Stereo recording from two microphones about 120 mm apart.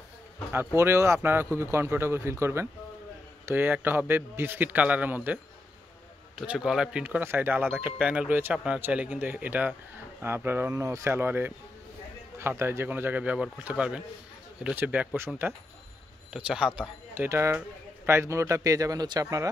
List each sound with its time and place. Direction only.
0.7 s speech: 25° right (ahead or behind)
10.7 s speech: 30° right (ahead or behind)
16.3 s speech: 10° right (ahead or behind)
17.1 s speech: 20° right (ahead or behind)